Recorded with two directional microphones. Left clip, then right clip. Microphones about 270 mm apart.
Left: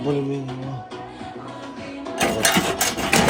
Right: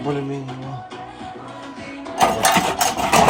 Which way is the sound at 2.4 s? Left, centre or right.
Centre.